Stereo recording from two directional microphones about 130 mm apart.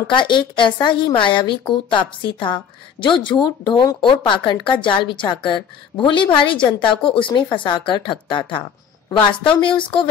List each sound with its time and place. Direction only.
0.1 s a woman's voice: 35° left (ahead or behind)
9.1 s a woman's voice: 10° left (ahead or behind)
9.6 s a woman's voice: 40° left (ahead or behind)